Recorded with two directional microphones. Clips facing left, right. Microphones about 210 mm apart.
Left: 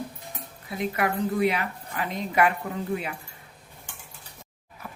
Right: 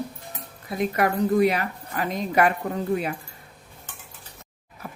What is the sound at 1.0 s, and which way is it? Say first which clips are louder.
Speech: right 5 dB; 40° right (ahead or behind).